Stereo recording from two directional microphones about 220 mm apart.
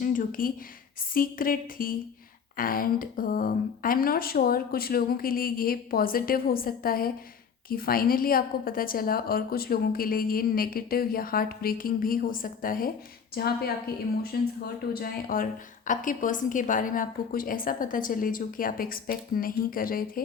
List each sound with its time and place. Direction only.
0.0 s a woman's voice: 40° left (ahead or behind)